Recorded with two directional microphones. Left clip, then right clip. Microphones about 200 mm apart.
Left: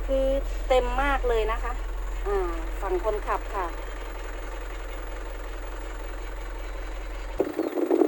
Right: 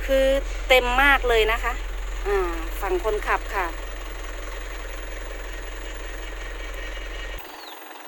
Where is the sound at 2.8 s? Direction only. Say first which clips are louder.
Right 3 dB; 10° right (ahead or behind).